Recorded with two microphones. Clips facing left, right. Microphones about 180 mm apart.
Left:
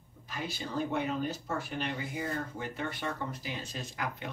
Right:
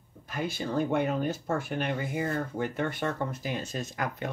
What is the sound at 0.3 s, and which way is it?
Speech, 55° right (ahead or behind).